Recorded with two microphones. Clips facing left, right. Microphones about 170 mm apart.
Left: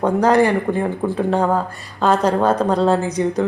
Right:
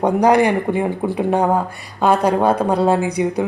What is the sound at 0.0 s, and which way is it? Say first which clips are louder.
A woman's voice: right 1 dB; 15° right (ahead or behind).